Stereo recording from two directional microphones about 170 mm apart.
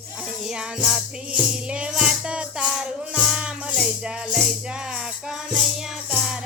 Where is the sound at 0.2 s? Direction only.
5° right (ahead or behind).